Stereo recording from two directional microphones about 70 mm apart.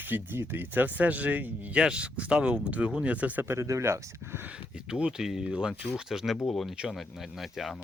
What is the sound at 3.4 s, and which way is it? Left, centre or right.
Speech, right.